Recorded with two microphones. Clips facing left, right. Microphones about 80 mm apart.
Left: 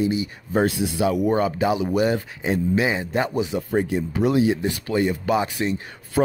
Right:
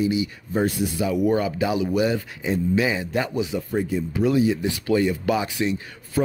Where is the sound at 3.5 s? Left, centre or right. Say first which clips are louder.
Left 3 dB; left.